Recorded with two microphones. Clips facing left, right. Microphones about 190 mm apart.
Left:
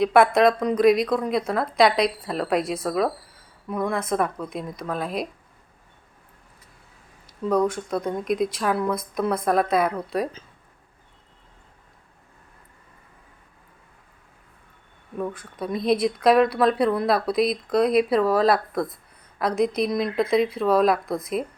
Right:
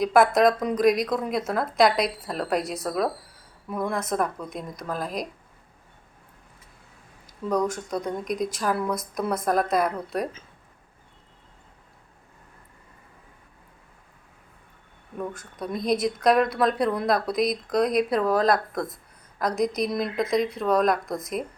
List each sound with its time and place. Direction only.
0.0 s speech: centre (ahead or behind)
7.4 s speech: centre (ahead or behind)
15.2 s speech: 5° left (ahead or behind)